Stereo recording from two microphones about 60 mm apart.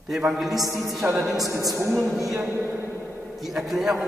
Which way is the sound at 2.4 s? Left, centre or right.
Right.